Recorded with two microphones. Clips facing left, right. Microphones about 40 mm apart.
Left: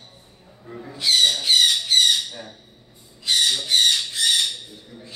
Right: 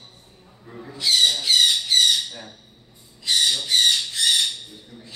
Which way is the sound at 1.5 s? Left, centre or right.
Centre.